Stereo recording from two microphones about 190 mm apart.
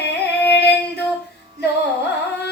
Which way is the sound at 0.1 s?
60° left (ahead or behind).